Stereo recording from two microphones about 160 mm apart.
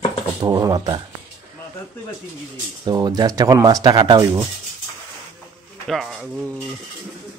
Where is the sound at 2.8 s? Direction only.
25° right (ahead or behind).